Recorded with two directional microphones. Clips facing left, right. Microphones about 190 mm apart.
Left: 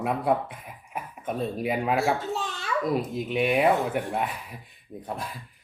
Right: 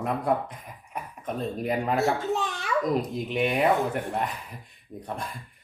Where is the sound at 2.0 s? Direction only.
15° right (ahead or behind).